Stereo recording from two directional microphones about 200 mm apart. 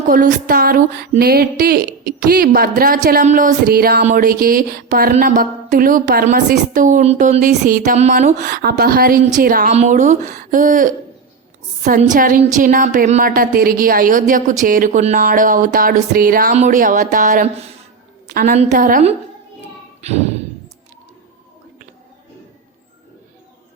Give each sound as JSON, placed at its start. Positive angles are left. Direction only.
{"t": 0.1, "sound": "a woman's voice", "side_deg": -45}
{"t": 20.0, "sound": "speech", "side_deg": -35}